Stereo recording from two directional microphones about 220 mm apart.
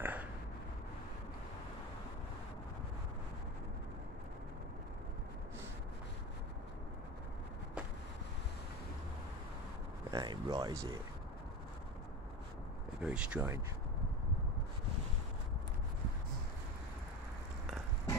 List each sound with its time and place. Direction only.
0.0 s a sound: 5° right (ahead or behind)
10.1 s speech: 20° right (ahead or behind)
13.0 s speech: 5° right (ahead or behind)